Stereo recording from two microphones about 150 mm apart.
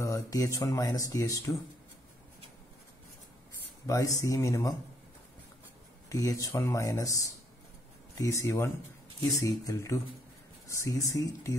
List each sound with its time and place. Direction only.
0.0 s speech: 20° left (ahead or behind)
3.8 s speech: 20° left (ahead or behind)
6.0 s speech: 20° left (ahead or behind)
8.2 s speech: 20° left (ahead or behind)